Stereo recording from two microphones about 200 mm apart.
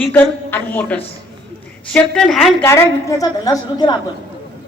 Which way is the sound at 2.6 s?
15° left (ahead or behind).